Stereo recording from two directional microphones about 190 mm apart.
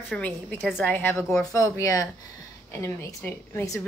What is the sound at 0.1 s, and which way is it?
A woman's voice, 10° left (ahead or behind).